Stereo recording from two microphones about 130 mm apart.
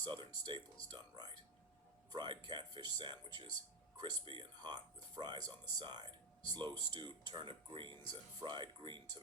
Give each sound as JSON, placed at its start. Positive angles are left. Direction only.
{"t": 0.0, "sound": "speech", "side_deg": -35}